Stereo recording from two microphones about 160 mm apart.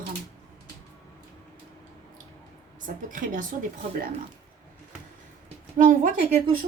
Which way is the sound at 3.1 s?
55° right (ahead or behind).